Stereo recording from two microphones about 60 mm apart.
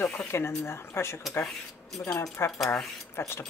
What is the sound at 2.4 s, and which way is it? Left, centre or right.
Speech, left.